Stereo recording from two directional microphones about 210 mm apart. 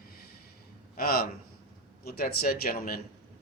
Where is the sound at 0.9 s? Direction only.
45° left (ahead or behind).